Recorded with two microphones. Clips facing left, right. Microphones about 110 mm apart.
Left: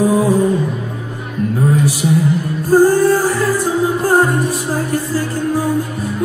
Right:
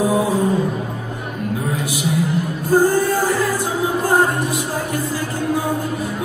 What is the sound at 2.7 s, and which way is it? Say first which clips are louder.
Music: left 5 dB; 40° left (ahead or behind).